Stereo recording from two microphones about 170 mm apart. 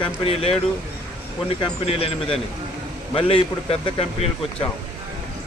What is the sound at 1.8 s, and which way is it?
Speech, 35° left (ahead or behind).